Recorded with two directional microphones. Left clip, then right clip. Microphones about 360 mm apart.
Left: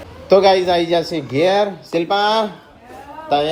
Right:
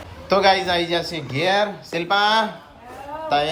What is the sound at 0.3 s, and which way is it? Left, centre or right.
Speech, centre.